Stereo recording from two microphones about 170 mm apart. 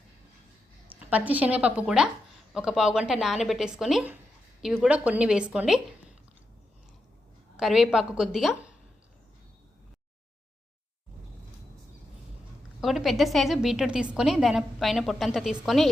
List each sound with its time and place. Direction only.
1.1 s a woman's voice: 10° right (ahead or behind)
7.5 s a woman's voice: 5° right (ahead or behind)
12.8 s a woman's voice: centre (ahead or behind)